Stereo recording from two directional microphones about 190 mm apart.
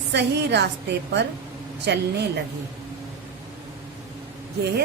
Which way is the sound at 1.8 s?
60° right (ahead or behind).